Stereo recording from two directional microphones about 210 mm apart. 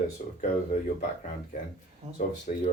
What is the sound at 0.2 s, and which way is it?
Speech, 40° left (ahead or behind).